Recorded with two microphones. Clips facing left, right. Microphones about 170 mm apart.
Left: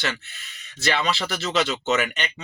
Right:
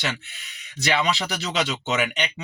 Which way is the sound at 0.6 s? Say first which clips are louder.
Right 1 dB; 15° right (ahead or behind).